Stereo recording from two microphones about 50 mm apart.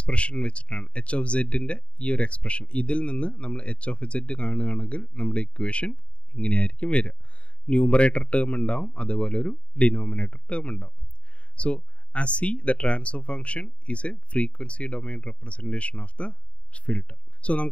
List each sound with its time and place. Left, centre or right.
0.0 s speech: left